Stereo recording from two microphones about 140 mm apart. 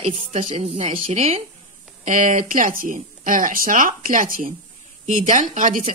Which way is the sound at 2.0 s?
70° right (ahead or behind).